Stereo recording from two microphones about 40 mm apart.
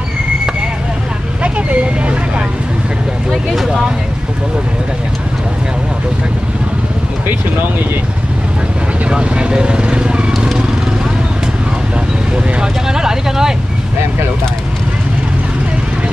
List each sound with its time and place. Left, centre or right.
1.4 s vehicle: right
3.6 s speech: centre
9.1 s speech: right
12.8 s speech: centre